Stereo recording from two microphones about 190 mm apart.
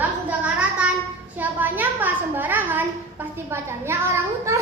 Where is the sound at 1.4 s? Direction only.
10° right (ahead or behind).